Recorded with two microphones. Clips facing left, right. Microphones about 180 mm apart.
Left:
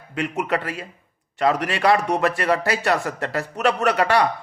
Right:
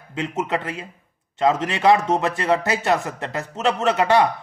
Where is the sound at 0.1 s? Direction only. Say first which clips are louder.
Left 1 dB; 20° right (ahead or behind).